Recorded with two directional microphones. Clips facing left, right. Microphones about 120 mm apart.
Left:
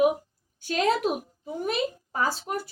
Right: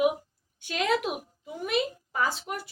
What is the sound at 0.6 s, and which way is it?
A woman's voice, 35° left (ahead or behind).